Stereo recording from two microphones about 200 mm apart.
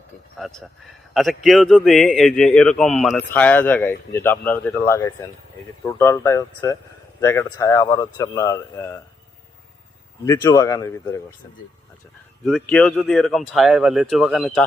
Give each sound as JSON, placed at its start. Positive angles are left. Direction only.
{"t": 0.3, "sound": "a man's voice", "side_deg": 0}
{"t": 10.2, "sound": "speech", "side_deg": 15}
{"t": 12.5, "sound": "a man's voice", "side_deg": 5}